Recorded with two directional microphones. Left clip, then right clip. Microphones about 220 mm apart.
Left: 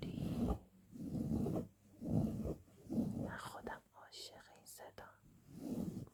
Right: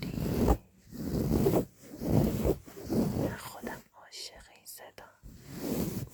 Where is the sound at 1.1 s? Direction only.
50° right (ahead or behind).